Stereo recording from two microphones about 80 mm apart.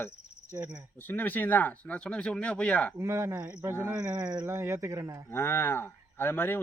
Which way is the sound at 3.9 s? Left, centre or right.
Right.